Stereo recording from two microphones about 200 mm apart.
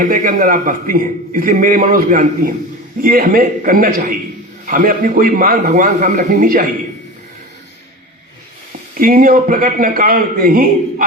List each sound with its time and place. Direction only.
0.0 s a man's voice: 45° right (ahead or behind)
9.0 s a man's voice: 45° right (ahead or behind)